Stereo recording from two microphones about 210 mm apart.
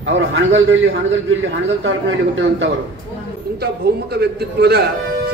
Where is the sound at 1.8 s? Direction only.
60° right (ahead or behind).